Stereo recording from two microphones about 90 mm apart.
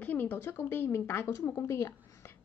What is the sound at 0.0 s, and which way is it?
A woman's voice, 20° left (ahead or behind).